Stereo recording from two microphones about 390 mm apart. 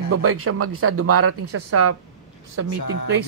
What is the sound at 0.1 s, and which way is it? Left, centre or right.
Speech, right.